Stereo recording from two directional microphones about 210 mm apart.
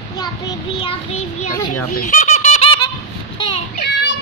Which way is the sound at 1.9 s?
35° left (ahead or behind).